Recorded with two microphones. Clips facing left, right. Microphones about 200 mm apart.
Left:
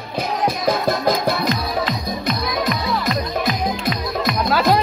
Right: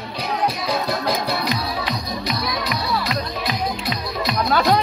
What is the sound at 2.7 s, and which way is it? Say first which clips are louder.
Music: left 2 dB; 50° left (ahead or behind).